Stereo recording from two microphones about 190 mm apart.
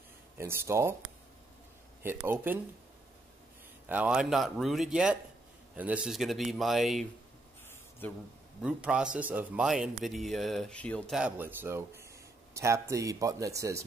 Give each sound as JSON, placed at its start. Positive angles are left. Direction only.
{"t": 0.4, "sound": "speech", "side_deg": -15}
{"t": 2.0, "sound": "speech", "side_deg": -10}
{"t": 3.9, "sound": "speech", "side_deg": -5}
{"t": 8.0, "sound": "a man's voice", "side_deg": 10}
{"t": 8.6, "sound": "speech", "side_deg": -5}